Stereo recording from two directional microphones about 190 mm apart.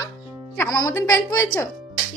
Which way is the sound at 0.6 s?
20° left (ahead or behind).